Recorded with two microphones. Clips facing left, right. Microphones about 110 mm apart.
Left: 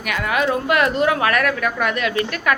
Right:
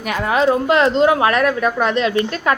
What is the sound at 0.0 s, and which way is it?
Speech, 30° right (ahead or behind).